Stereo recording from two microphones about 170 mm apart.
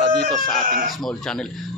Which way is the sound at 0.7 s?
55° right (ahead or behind).